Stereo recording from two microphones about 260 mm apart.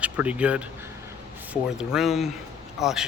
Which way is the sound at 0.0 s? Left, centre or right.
Centre.